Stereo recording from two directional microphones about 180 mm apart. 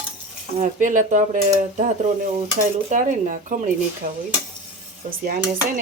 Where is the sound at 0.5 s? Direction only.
45° right (ahead or behind).